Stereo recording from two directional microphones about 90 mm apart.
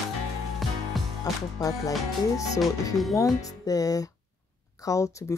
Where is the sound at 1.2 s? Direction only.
45° left (ahead or behind).